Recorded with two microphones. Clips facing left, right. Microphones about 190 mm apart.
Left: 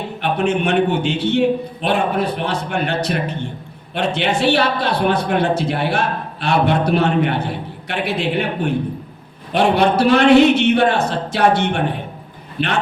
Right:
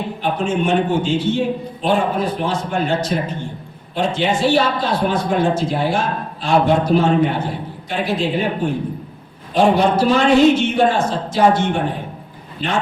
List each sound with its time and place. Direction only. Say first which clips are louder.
0.2 s a man's voice: left 2 dB; 65° left (ahead or behind)